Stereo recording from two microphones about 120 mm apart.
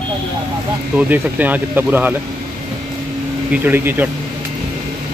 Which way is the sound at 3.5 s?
15° right (ahead or behind).